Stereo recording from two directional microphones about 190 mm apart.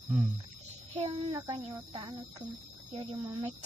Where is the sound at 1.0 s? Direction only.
35° right (ahead or behind).